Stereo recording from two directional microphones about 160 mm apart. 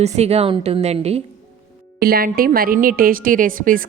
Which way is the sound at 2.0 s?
70° right (ahead or behind).